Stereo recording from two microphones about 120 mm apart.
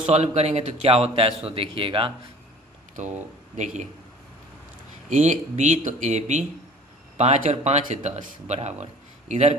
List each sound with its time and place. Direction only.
0.1 s speech: 65° right (ahead or behind); by 2.1 s 45° right (ahead or behind)
3.5 s speech: 75° right (ahead or behind)
5.0 s speech: 85° right; by 9.6 s 65° right (ahead or behind)